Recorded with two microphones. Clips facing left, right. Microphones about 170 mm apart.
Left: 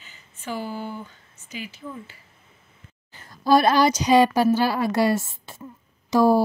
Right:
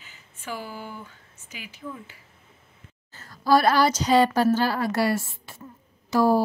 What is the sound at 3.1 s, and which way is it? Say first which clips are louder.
Speech: left 2 dB; 20° left (ahead or behind).